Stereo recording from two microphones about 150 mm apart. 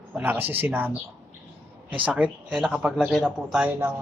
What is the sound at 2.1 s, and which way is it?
A man's voice, 5° right (ahead or behind).